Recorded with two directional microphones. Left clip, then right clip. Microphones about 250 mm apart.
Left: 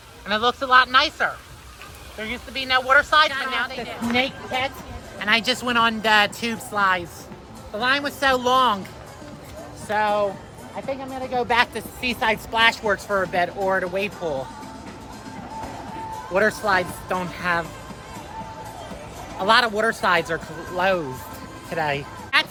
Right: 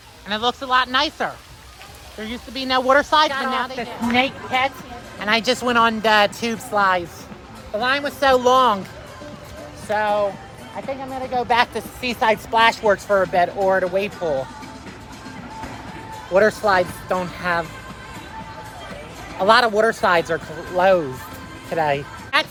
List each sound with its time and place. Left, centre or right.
0.3 s speech: centre
2.1 s speech: right
2.8 s speech: right
3.3 s speech: centre
3.7 s speech: right
5.2 s speech: centre
9.8 s speech: centre
16.3 s speech: centre
19.4 s speech: centre